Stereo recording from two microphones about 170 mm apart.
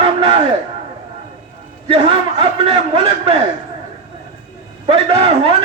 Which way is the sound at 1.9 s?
30° right (ahead or behind).